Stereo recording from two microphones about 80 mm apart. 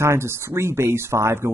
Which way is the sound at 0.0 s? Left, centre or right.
Right.